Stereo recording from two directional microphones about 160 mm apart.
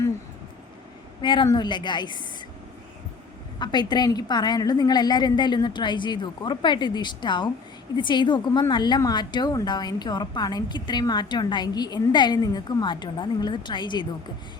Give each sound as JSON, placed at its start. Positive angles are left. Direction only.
{"t": 1.2, "sound": "a woman's voice", "side_deg": 30}
{"t": 3.6, "sound": "a woman's voice", "side_deg": 25}